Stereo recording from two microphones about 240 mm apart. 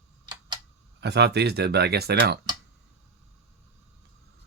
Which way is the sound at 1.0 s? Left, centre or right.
Right.